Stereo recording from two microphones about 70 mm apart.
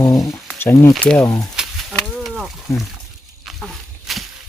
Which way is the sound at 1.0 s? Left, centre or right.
Centre.